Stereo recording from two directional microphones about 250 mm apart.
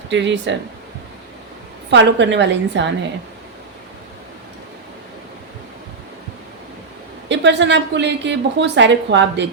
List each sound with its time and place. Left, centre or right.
0.1 s a woman's voice: right
1.9 s a woman's voice: right
7.3 s a woman's voice: right